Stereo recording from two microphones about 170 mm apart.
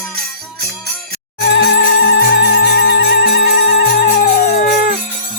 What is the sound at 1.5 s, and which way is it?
Music, 90° left.